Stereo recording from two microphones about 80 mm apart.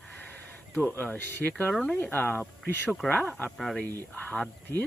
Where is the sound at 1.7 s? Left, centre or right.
Centre.